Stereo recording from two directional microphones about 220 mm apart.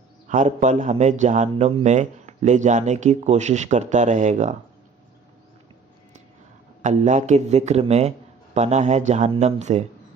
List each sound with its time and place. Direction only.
0.3 s a man's voice: 35° right (ahead or behind)
6.8 s a man's voice: 35° right (ahead or behind)